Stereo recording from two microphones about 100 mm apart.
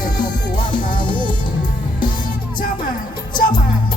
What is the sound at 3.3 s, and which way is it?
Music, 50° left (ahead or behind).